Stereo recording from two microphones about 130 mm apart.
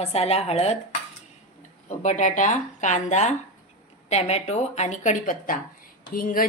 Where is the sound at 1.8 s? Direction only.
75° left (ahead or behind).